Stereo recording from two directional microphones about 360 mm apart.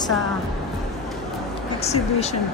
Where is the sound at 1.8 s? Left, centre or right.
Centre.